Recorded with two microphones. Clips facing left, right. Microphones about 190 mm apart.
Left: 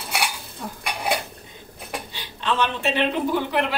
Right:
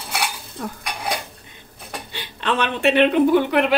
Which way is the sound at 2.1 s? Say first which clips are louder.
Right 3 dB; 60° right (ahead or behind).